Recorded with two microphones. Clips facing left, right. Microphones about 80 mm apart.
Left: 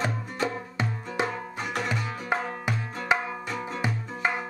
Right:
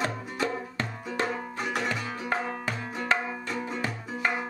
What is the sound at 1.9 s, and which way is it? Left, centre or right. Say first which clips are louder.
Tabla: left 1 dB; centre.